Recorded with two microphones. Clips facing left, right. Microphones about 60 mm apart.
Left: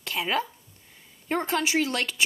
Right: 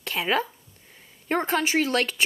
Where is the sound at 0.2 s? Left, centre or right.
Centre.